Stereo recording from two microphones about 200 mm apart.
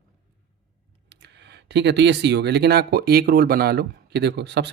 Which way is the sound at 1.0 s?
60° right (ahead or behind).